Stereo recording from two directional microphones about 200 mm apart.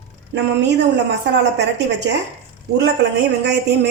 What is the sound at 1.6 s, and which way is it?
Speech, 60° right (ahead or behind).